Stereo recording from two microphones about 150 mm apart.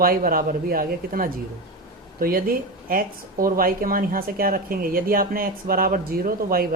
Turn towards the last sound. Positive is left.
turn(degrees=-75)  # may be behind; listen again after turning